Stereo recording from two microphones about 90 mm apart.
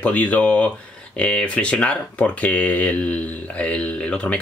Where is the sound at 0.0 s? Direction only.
15° left (ahead or behind).